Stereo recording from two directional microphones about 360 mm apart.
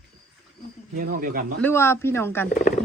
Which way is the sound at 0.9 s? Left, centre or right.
Right.